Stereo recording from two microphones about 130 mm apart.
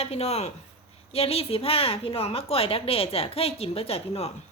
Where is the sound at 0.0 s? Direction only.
55° left (ahead or behind).